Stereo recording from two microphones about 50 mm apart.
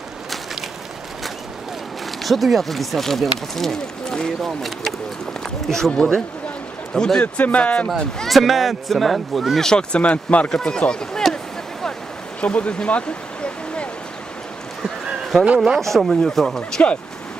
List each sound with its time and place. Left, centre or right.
2.2 s speech: centre
5.6 s a man's voice: centre
7.3 s speech: left
8.3 s speech: centre
9.6 s speech: centre
10.5 s speech: centre
12.4 s a sound: left
15.5 s speech: centre
15.8 s speech: centre